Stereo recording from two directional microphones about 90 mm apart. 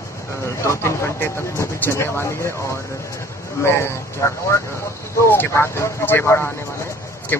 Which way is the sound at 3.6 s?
30° left (ahead or behind).